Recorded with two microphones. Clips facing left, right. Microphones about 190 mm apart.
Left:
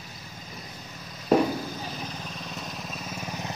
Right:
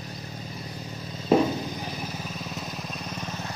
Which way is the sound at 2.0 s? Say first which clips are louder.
Right 2 dB; 5° right (ahead or behind).